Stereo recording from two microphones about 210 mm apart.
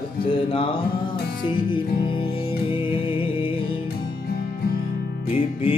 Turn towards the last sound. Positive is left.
turn(degrees=25)  # may be behind; listen again after turning